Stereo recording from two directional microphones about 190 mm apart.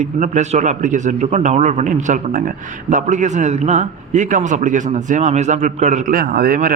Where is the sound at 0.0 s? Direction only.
40° right (ahead or behind).